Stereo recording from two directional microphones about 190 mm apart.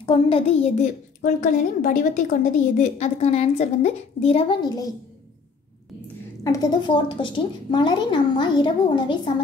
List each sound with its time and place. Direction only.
0.0 s a woman's voice: 30° left (ahead or behind)
4.6 s speech: 20° left (ahead or behind)
6.4 s speech: 20° left (ahead or behind)